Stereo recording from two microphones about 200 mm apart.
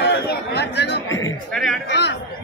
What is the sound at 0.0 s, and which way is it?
Chatter, 55° left (ahead or behind).